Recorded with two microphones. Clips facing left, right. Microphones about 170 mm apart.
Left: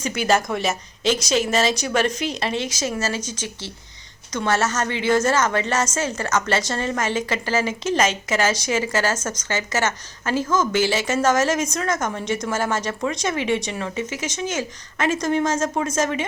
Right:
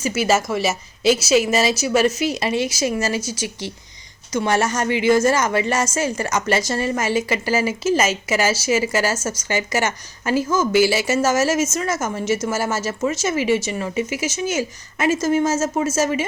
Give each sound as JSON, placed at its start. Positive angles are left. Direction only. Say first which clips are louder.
{"t": 0.0, "sound": "a woman's voice", "louder": "right 2 dB", "side_deg": -5}